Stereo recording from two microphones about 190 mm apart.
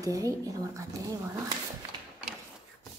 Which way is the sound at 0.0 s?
20° right (ahead or behind).